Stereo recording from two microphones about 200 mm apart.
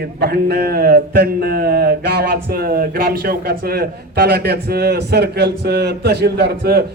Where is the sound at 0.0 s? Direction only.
50° right (ahead or behind).